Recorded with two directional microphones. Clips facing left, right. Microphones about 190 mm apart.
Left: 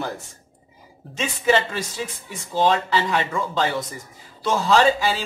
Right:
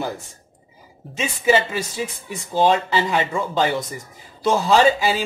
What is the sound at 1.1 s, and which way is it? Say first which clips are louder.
Speech: right 2 dB; 10° right (ahead or behind).